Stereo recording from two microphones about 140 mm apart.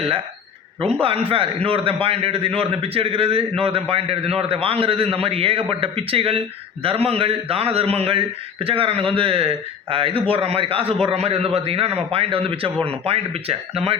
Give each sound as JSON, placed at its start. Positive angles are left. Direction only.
{"t": 1.6, "sound": "a man's voice", "side_deg": -40}